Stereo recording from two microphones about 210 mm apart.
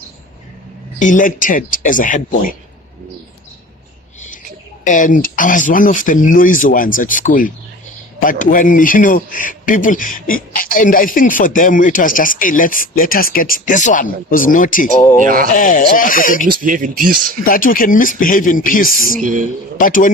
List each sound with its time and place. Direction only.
0.9 s speech: 35° left (ahead or behind)
4.8 s speech: 40° left (ahead or behind)
15.2 s speech: 45° right (ahead or behind)
15.5 s speech: 40° left (ahead or behind)
16.5 s speech: 40° right (ahead or behind)
17.4 s speech: 45° left (ahead or behind)
19.2 s speech: 40° right (ahead or behind)
19.8 s speech: 40° left (ahead or behind)